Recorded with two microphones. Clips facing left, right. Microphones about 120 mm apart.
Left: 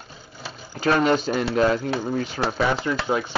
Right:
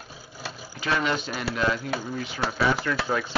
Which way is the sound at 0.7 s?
45° left (ahead or behind).